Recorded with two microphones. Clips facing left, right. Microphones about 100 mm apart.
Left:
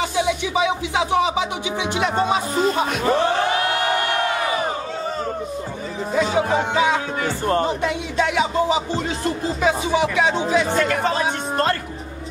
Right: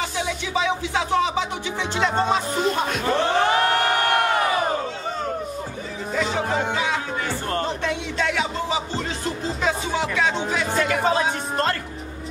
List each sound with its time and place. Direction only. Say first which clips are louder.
0.3 s speech: left 3 dB; 15° left (ahead or behind)
6.1 s speech: left 4 dB; 15° left (ahead or behind)
10.5 s speech: left 4 dB; 5° right (ahead or behind)